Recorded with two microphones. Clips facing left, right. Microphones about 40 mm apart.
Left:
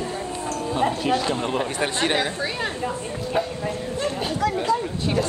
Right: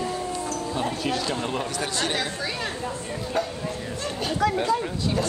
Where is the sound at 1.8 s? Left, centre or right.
Left.